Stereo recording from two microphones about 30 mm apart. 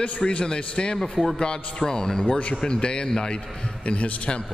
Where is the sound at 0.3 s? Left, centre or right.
Left.